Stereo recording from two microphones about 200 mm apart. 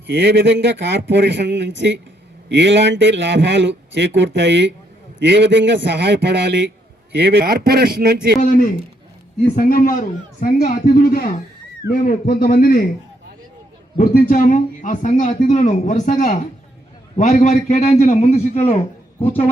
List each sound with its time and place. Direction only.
0.1 s a man's voice: 60° right (ahead or behind)
9.4 s a man's voice: 45° left (ahead or behind)
13.9 s speech: 45° left (ahead or behind)